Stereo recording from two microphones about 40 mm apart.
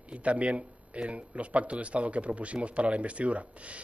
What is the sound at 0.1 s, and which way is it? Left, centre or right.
A man's voice, right.